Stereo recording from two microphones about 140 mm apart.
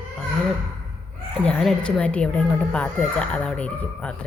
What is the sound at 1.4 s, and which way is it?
Speech, 5° left (ahead or behind).